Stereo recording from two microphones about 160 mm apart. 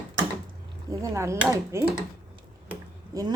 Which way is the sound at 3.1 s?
20° right (ahead or behind).